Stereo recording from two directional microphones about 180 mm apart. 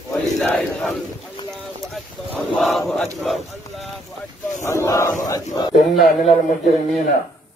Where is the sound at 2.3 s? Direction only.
Centre (ahead or behind).